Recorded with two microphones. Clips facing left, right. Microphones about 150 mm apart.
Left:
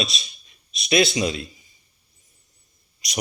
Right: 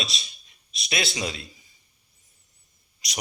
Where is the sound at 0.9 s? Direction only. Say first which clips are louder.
Left 9 dB; 20° left (ahead or behind).